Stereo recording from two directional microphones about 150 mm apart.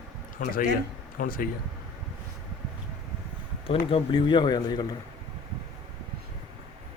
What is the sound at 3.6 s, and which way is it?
Speech, 40° left (ahead or behind).